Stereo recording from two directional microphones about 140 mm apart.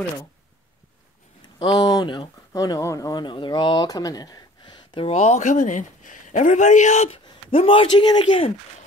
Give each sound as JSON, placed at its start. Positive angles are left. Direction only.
{"t": 1.6, "sound": "speech", "side_deg": 30}
{"t": 7.5, "sound": "speech", "side_deg": 40}